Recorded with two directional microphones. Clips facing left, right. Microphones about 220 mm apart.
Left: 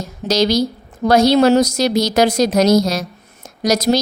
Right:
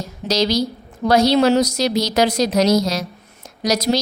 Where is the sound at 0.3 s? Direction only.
50° left (ahead or behind).